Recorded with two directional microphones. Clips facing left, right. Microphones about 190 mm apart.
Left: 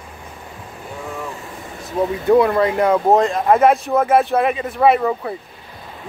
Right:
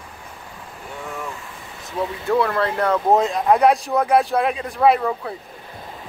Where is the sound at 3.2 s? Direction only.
Centre (ahead or behind).